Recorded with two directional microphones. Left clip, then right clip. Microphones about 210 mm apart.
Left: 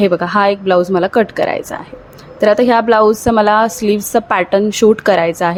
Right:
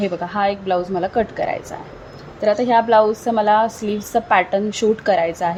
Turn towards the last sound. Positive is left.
turn(degrees=20)  # may be behind; listen again after turning